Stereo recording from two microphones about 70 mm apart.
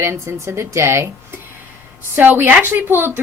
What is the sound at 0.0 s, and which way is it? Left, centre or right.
A woman's voice, right.